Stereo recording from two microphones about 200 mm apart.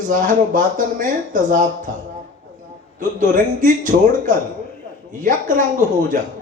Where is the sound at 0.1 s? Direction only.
40° right (ahead or behind).